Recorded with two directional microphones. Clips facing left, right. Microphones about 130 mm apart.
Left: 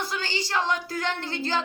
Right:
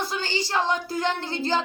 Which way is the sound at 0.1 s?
30° right (ahead or behind).